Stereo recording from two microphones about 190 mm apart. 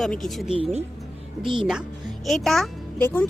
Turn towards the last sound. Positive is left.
turn(degrees=10)  # may be behind; listen again after turning